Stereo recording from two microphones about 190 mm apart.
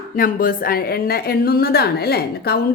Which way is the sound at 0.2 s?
50° left (ahead or behind).